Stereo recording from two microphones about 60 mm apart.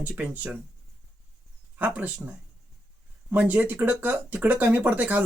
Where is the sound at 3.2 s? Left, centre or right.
Right.